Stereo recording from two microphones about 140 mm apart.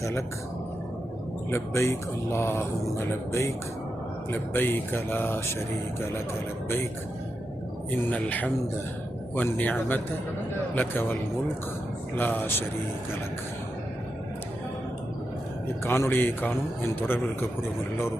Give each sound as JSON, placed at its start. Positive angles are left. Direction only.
{"t": 0.0, "sound": "speech", "side_deg": 20}
{"t": 1.5, "sound": "a man's voice", "side_deg": 20}
{"t": 7.9, "sound": "a man's voice", "side_deg": 10}
{"t": 15.8, "sound": "a man's voice", "side_deg": 15}